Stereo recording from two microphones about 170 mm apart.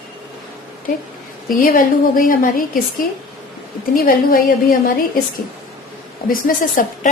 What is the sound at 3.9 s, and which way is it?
A woman's voice, 60° left (ahead or behind).